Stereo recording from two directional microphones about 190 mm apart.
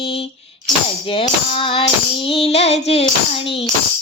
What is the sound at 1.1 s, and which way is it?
Child singing, 30° left (ahead or behind).